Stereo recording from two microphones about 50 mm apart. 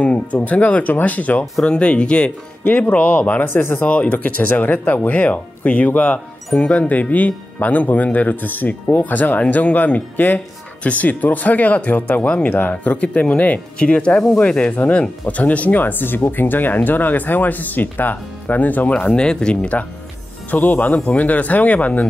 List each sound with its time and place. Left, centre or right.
0.0 s speech: left
1.6 s speech: left
2.6 s speech: left
3.4 s speech: left
3.8 s speech: left
12.9 s speech: left
19.1 s speech: centre
20.5 s speech: left